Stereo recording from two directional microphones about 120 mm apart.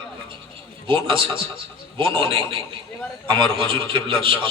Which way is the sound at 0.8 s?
45° right (ahead or behind).